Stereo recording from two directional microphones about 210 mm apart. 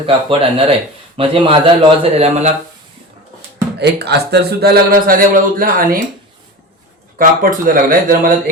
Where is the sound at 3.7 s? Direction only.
50° right (ahead or behind).